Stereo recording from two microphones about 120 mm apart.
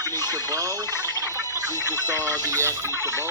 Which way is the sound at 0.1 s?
20° left (ahead or behind).